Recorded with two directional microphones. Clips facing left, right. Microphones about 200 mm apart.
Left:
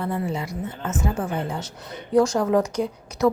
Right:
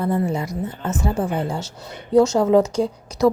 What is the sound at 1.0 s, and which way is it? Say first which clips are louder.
A woman's voice: right 3 dB; 30° right (ahead or behind).